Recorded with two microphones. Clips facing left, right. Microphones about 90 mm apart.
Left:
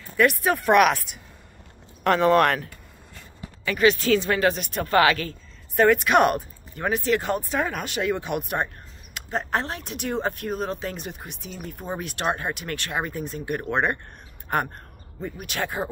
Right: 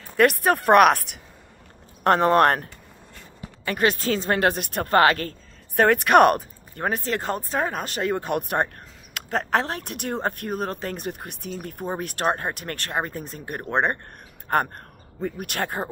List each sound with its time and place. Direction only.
0.2 s speech: 55° right (ahead or behind)
2.0 s speech: 45° right (ahead or behind)
4.4 s speech: 50° right (ahead or behind)
5.8 s speech: 55° right (ahead or behind)
6.8 s speech: 40° right (ahead or behind)
15.4 s speech: 50° right (ahead or behind)